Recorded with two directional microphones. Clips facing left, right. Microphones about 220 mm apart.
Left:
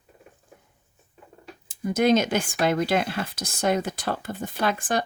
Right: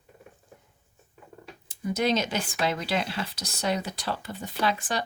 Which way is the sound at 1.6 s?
50° left (ahead or behind).